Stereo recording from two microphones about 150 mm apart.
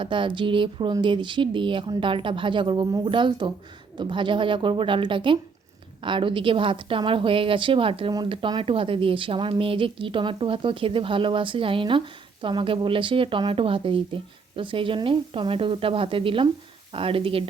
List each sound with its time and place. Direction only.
0.0 s a woman's voice: 35° right (ahead or behind)